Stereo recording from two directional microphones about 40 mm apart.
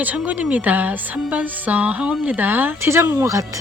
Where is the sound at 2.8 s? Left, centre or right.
Right.